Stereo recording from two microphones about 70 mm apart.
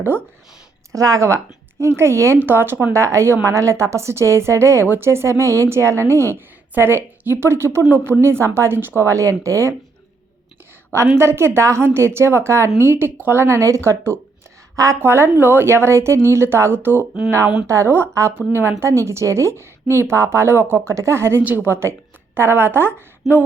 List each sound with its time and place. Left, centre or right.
0.9 s a woman's voice: right
2.4 s a woman's voice: right
2.9 s a woman's voice: right
10.9 s a woman's voice: right